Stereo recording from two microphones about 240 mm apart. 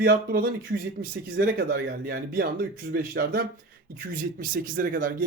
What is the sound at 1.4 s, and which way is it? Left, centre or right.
A man's voice, right.